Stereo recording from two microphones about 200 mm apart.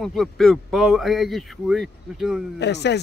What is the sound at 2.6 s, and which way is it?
Speech, 60° left (ahead or behind).